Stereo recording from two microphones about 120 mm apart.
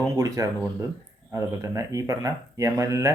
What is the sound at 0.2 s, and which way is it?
Speech, 30° right (ahead or behind).